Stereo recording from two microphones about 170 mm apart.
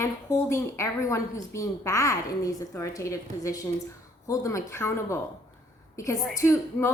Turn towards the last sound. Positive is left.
turn(degrees=15)  # may be behind; listen again after turning